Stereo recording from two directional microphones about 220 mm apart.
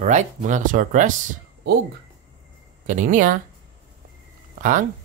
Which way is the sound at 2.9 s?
35° right (ahead or behind).